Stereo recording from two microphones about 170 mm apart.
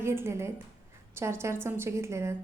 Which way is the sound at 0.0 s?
15° right (ahead or behind).